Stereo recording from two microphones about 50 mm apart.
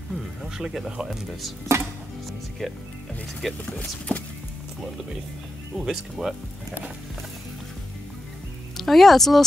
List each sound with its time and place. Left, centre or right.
0.4 s speech: centre
1.7 s speech: right
2.6 s speech: centre
4.1 s music: left
5.8 s speech: centre
8.7 s speech: centre